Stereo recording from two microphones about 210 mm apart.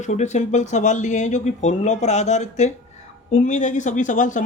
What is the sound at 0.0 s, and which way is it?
Speech, 35° left (ahead or behind).